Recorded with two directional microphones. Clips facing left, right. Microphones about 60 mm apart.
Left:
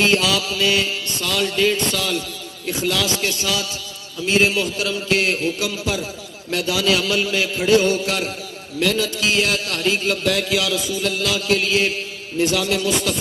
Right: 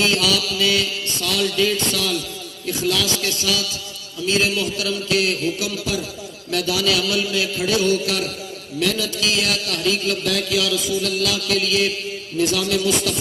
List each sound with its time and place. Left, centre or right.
0.0 s a man's voice: left